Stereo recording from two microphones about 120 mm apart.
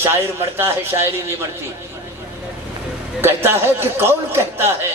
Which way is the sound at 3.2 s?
20° right (ahead or behind).